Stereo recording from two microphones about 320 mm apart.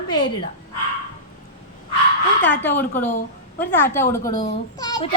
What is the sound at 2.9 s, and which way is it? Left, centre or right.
Speech, left.